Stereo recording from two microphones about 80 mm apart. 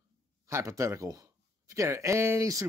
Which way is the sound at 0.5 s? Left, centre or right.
Right.